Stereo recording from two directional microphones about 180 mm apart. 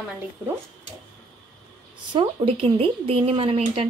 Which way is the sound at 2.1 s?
30° right (ahead or behind).